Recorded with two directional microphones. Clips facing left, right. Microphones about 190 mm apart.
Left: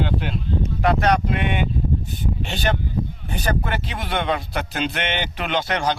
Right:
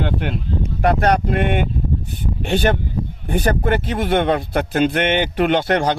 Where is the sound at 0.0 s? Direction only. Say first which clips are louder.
Right 2 dB; 55° right (ahead or behind).